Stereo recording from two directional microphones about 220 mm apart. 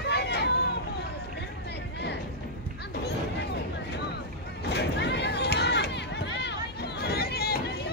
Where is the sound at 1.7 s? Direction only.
50° left (ahead or behind).